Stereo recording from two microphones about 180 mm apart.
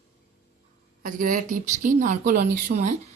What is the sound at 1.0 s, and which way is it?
A woman's voice, 50° right (ahead or behind).